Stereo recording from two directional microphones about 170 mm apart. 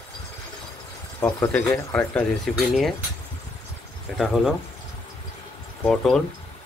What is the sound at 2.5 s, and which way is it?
Speech, 5° right (ahead or behind).